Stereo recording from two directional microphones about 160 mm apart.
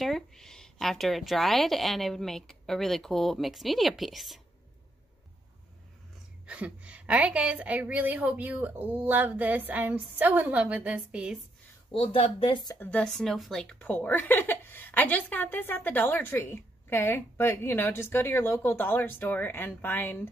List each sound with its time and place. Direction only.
0.0 s a woman's voice: centre (ahead or behind)
6.4 s a woman's voice: 10° right (ahead or behind)
11.9 s speech: 35° left (ahead or behind)
12.9 s a woman's voice: 5° left (ahead or behind)